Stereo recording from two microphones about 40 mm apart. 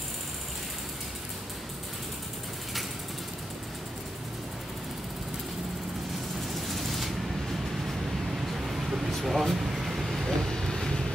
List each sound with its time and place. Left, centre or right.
6.5 s vehicle: centre
8.5 s vehicle: centre
10.2 s vehicle: centre